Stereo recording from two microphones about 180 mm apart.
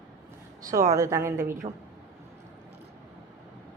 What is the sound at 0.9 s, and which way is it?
Speech, 15° right (ahead or behind).